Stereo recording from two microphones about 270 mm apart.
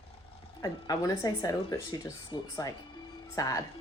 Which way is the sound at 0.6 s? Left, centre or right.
Centre.